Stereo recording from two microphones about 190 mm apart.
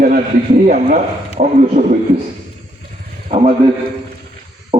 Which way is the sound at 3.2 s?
30° right (ahead or behind).